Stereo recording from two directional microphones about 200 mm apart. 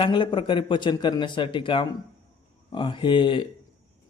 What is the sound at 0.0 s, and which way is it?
Speech, 25° left (ahead or behind).